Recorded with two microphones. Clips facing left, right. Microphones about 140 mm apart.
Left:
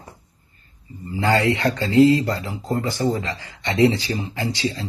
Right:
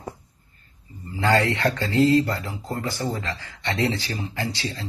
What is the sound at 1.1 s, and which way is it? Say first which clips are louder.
Speech: left 2 dB; 10° left (ahead or behind).